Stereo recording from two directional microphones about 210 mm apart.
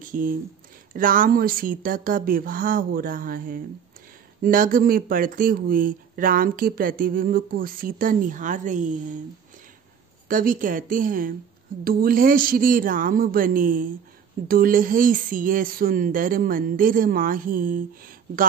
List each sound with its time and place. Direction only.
0.1 s speech: 40° right (ahead or behind)
10.2 s speech: 40° right (ahead or behind)